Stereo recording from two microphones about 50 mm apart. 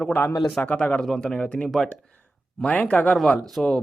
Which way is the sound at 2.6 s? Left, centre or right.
Left.